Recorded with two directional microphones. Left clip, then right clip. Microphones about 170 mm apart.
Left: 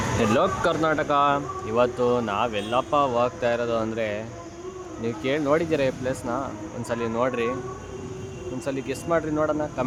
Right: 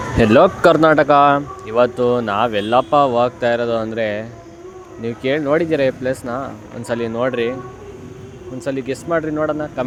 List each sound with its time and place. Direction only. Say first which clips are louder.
0.2 s speech: right 11 dB; 35° right (ahead or behind); by 7.5 s 20° right (ahead or behind)
8.6 s speech: right 7 dB; 15° right (ahead or behind)